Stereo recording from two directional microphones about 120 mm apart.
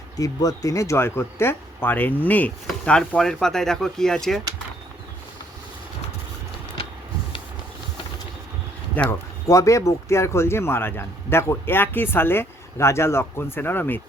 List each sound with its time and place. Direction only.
0.2 s speech: 30° left (ahead or behind); by 4.4 s 5° left (ahead or behind)
9.0 s speech: 15° left (ahead or behind)
9.5 s speech: 25° left (ahead or behind)